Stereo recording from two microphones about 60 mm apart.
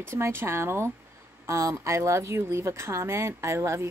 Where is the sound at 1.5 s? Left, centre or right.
Right.